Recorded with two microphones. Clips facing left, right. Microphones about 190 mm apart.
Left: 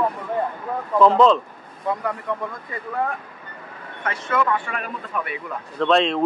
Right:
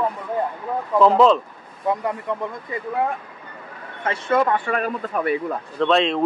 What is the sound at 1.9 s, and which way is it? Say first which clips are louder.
Speech: right 2 dB; 20° right (ahead or behind).